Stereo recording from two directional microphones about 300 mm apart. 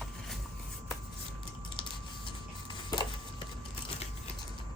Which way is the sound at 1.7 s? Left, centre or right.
Centre.